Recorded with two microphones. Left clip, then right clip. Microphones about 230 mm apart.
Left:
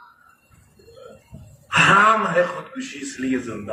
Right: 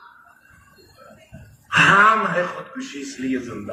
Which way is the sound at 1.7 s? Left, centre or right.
Left.